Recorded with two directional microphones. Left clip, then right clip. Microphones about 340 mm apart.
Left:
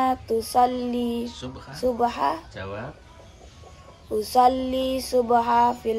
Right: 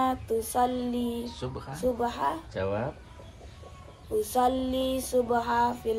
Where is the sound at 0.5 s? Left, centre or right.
Centre.